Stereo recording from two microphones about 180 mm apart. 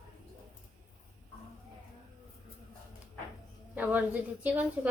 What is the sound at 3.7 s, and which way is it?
A woman's voice, 10° right (ahead or behind).